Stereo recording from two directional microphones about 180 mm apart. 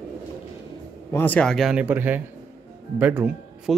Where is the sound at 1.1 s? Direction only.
10° left (ahead or behind).